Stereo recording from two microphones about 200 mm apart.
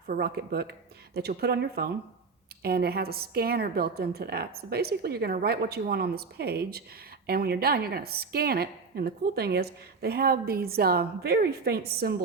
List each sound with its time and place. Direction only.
0.1 s a woman's voice: 50° right (ahead or behind)